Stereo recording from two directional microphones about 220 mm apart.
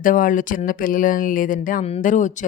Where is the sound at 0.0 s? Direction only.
35° left (ahead or behind).